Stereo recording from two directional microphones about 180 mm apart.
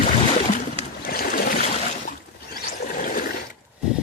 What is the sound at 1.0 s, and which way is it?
Boat, 55° left (ahead or behind).